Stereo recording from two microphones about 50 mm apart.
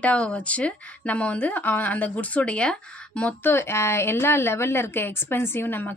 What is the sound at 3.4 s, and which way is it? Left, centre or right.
A woman's voice, left.